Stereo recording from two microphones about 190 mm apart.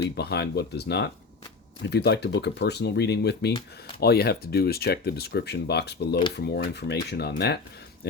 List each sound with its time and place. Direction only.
0.2 s speech: 60° left (ahead or behind)